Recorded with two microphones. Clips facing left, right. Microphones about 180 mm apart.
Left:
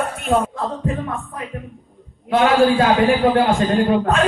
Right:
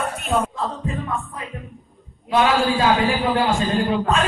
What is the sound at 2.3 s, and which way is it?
Speech, 55° left (ahead or behind).